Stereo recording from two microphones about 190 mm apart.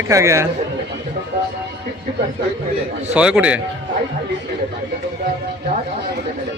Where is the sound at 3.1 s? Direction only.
5° right (ahead or behind).